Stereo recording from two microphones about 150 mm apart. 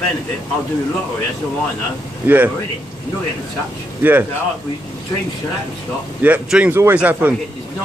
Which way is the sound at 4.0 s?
15° right (ahead or behind).